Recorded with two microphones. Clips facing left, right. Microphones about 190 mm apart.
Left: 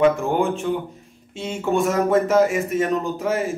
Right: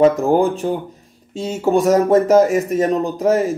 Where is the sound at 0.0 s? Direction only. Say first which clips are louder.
Right 5 dB; 35° right (ahead or behind).